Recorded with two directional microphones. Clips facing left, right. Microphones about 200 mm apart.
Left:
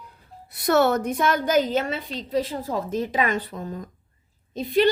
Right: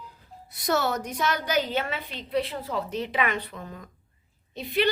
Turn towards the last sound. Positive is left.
turn(degrees=45)  # may be behind; listen again after turning